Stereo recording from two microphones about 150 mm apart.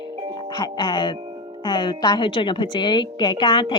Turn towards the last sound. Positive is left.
turn(degrees=30)  # may be behind; listen again after turning